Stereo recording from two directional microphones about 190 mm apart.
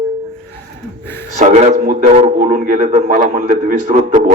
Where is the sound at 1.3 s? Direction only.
40° right (ahead or behind).